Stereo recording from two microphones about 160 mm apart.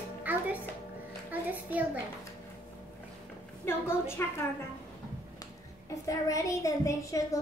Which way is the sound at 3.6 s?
15° left (ahead or behind).